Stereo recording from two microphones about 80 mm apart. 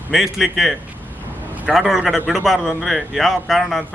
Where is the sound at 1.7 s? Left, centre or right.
Centre.